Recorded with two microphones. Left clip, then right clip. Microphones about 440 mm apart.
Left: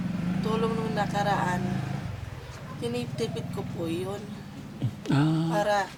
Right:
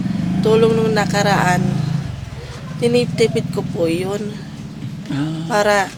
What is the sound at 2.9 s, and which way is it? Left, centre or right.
Speech, right.